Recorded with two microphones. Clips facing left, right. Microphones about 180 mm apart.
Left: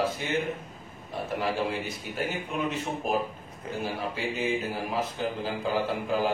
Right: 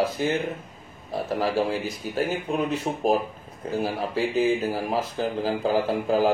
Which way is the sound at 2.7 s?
35° right (ahead or behind).